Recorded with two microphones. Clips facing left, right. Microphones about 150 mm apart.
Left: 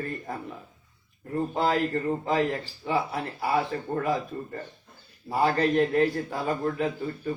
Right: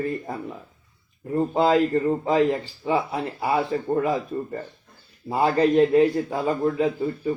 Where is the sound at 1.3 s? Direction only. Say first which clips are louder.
Right 6 dB; 20° right (ahead or behind).